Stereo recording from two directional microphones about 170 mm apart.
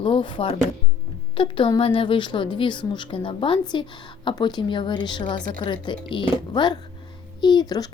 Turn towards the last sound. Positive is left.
turn(degrees=25)  # may be behind; listen again after turning